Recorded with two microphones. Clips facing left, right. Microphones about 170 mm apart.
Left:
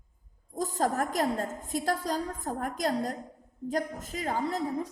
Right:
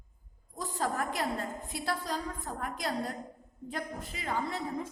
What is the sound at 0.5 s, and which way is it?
A woman's voice, 45° left (ahead or behind).